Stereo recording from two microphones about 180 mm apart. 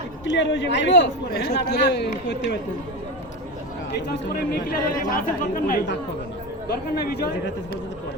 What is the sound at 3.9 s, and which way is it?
Speech, 65° left (ahead or behind).